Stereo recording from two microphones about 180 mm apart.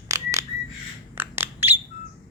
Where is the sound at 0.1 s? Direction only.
20° right (ahead or behind).